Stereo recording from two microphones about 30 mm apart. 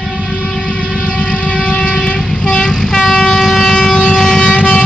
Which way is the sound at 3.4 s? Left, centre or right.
Centre.